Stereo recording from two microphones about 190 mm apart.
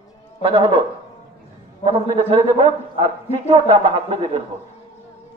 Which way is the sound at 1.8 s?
30° right (ahead or behind).